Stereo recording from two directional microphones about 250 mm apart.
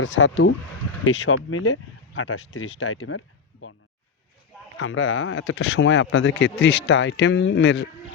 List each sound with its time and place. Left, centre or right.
0.0 s speech: left
4.8 s speech: left